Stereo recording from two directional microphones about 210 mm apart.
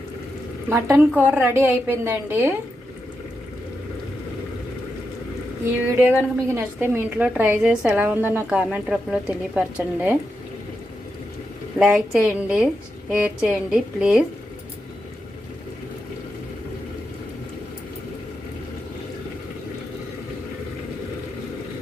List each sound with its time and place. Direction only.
0.7 s a woman's voice: 10° right (ahead or behind)
6.0 s a woman's voice: 10° right (ahead or behind)
11.8 s a woman's voice: 5° right (ahead or behind)